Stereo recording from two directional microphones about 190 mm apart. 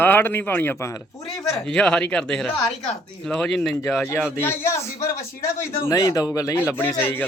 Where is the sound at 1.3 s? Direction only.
5° left (ahead or behind).